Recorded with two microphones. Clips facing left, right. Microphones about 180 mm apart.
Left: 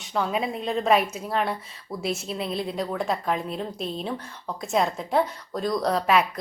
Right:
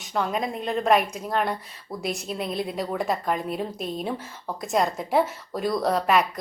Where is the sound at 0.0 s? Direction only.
Centre (ahead or behind).